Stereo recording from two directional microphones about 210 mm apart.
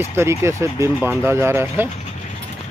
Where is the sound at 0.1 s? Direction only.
10° right (ahead or behind).